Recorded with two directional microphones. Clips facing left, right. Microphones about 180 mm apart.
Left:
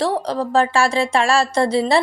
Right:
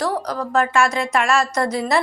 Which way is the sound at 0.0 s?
30° left (ahead or behind).